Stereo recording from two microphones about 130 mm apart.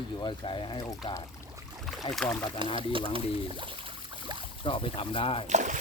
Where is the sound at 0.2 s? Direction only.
40° left (ahead or behind).